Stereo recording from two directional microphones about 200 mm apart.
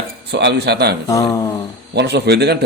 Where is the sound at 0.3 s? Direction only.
55° right (ahead or behind).